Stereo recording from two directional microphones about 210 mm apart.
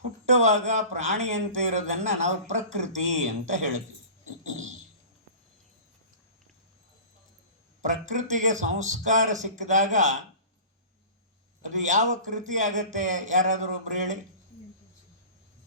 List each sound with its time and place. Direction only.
0.3 s a man's voice: 35° right (ahead or behind)
4.4 s a sound: 35° right (ahead or behind)
7.8 s a man's voice: 35° right (ahead or behind)
11.6 s a man's voice: 35° right (ahead or behind)